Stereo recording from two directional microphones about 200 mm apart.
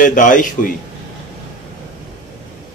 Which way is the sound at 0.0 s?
40° left (ahead or behind).